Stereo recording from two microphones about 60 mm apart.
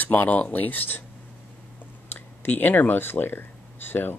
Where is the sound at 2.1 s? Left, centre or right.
Left.